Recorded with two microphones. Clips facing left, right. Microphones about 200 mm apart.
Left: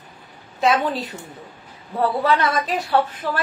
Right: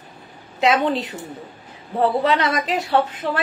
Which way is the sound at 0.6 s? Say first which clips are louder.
Right 1 dB; 20° right (ahead or behind).